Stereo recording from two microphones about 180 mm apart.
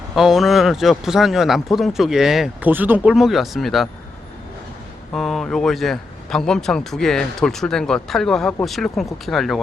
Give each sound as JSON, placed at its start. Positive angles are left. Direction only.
{"t": 0.2, "sound": "a man's voice", "side_deg": 0}
{"t": 5.1, "sound": "a man's voice", "side_deg": 0}